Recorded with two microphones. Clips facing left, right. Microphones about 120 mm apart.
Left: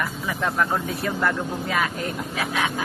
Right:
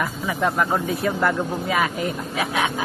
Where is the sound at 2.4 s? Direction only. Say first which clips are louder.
Right 3 dB; 20° right (ahead or behind).